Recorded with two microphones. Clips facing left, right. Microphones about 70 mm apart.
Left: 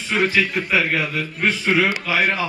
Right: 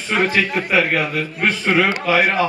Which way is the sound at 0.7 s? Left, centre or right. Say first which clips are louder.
Right 3 dB; right.